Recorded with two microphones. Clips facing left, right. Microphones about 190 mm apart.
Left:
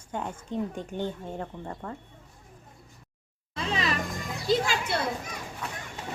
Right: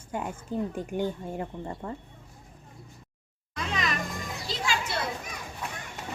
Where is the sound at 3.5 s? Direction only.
30° left (ahead or behind).